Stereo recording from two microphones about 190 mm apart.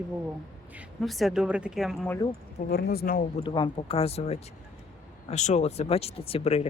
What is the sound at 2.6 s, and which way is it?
Speech, 55° left (ahead or behind).